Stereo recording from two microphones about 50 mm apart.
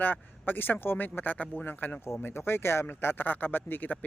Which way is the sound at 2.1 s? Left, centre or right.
Left.